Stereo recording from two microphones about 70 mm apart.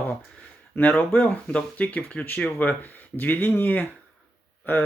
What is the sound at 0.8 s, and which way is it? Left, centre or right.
Speech, left.